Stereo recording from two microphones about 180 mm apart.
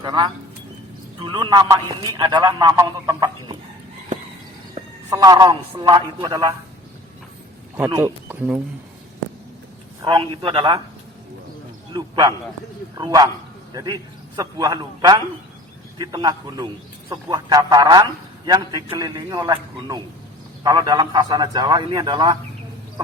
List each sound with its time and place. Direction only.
0.0 s a man's voice: 25° right (ahead or behind)
5.1 s a man's voice: 20° right (ahead or behind)
7.9 s speech: 20° right (ahead or behind)
10.0 s a man's voice: 25° right (ahead or behind)
11.9 s a man's voice: 25° right (ahead or behind)